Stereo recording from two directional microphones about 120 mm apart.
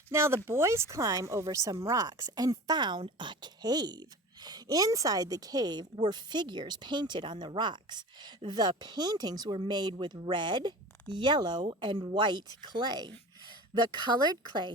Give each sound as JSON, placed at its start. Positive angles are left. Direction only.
{"t": 0.1, "sound": "speech", "side_deg": -20}